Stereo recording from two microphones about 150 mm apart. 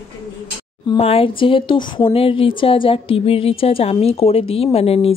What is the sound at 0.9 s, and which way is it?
Speech, 40° left (ahead or behind).